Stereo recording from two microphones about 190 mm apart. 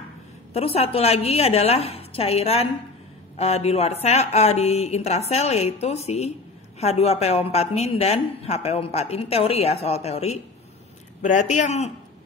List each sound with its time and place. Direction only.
0.5 s a woman's voice: 30° left (ahead or behind)